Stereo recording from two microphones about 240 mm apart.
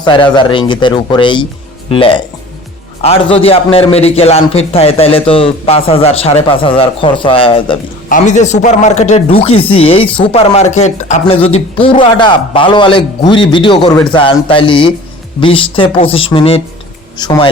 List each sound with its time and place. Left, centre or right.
0.0 s speech: centre